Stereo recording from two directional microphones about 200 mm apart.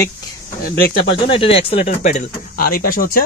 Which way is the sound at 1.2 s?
25° left (ahead or behind).